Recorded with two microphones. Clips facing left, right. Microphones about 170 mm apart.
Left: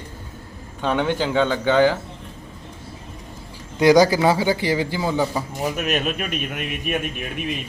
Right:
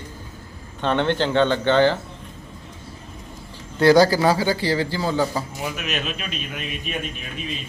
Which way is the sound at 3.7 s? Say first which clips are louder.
Even; 15° left (ahead or behind).